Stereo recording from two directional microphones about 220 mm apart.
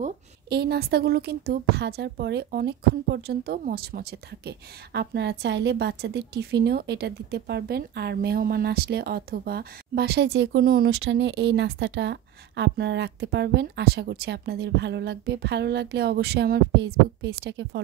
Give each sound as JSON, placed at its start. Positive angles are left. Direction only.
{"t": 0.5, "sound": "a woman's voice", "side_deg": -45}